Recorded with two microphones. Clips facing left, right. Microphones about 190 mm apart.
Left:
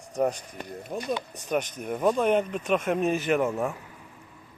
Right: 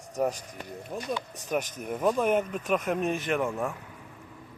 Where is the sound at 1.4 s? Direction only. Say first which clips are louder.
Left 2 dB; centre (ahead or behind).